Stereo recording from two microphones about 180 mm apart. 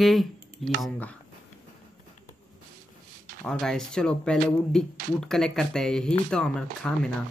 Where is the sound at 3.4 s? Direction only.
5° left (ahead or behind).